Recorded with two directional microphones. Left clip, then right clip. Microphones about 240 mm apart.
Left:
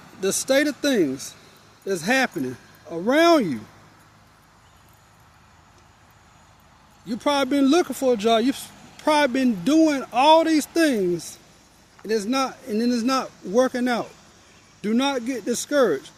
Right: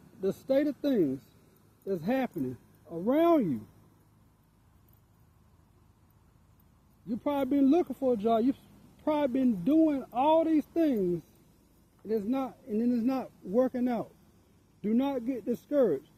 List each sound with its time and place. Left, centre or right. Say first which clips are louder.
0.4 s speech: left 8 dB; centre
7.1 s speech: left 8 dB; centre
12.0 s speech: left 9 dB; centre